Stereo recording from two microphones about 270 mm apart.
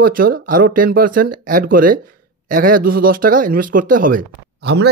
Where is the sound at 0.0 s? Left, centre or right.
Right.